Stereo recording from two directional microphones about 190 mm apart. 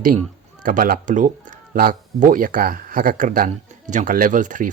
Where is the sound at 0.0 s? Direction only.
45° right (ahead or behind).